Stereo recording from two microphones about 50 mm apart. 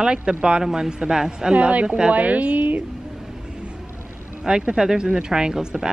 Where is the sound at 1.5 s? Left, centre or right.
Right.